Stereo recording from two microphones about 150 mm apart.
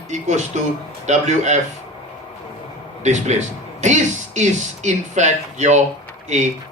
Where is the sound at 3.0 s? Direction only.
50° right (ahead or behind).